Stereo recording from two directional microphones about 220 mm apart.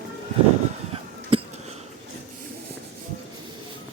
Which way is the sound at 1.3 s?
25° right (ahead or behind).